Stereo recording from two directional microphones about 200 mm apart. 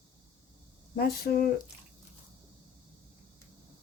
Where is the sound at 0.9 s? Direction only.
50° left (ahead or behind).